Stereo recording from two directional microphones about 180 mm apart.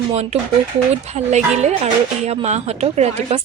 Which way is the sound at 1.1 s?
40° right (ahead or behind).